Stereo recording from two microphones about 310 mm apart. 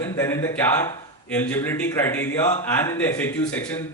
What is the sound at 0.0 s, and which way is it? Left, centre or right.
A man's voice, centre.